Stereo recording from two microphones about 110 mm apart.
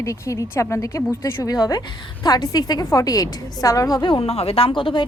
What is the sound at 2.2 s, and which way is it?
A woman's voice, 35° left (ahead or behind).